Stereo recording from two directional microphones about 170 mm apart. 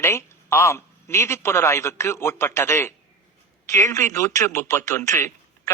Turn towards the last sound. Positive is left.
turn(degrees=15)  # may be behind; listen again after turning